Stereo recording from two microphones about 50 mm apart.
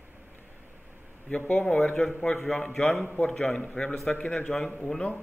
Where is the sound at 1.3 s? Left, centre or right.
Left.